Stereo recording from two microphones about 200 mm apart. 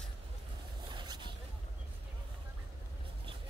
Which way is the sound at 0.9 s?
20° right (ahead or behind).